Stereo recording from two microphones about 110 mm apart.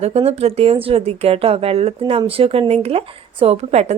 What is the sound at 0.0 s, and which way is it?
Speech, 70° right (ahead or behind).